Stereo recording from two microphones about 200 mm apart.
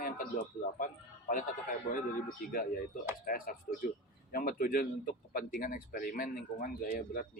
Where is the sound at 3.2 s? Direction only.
45° left (ahead or behind).